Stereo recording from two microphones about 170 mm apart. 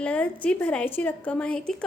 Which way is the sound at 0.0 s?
10° left (ahead or behind).